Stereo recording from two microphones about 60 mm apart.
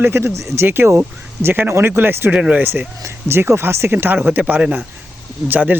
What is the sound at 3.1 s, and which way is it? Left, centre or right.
Speech, right.